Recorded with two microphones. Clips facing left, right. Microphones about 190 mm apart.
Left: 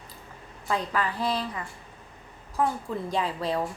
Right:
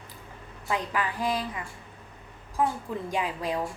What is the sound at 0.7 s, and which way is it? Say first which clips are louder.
Speech: left 1 dB; 15° right (ahead or behind).